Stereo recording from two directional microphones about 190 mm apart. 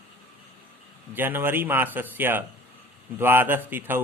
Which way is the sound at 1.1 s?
10° right (ahead or behind).